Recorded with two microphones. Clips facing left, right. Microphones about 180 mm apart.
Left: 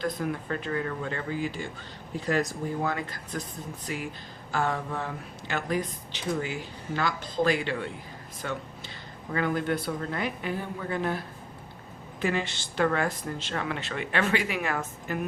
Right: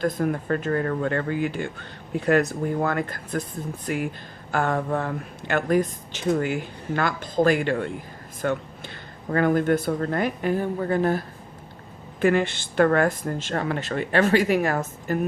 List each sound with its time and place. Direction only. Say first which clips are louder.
0.0 s speech: right 6 dB; 50° right (ahead or behind)
12.2 s speech: right 8 dB; 55° right (ahead or behind)